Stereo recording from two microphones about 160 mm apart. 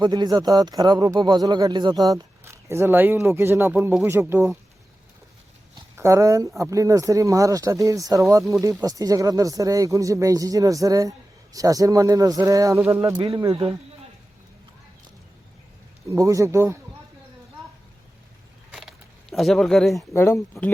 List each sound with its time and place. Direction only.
0.0 s speech: 25° right (ahead or behind)
6.0 s speech: 20° right (ahead or behind)
16.0 s speech: 20° right (ahead or behind)
18.7 s a sound: centre (ahead or behind)
20.0 s speech: 15° left (ahead or behind)